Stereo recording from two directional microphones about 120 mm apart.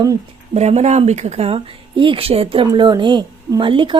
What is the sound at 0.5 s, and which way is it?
Speech, 65° right (ahead or behind).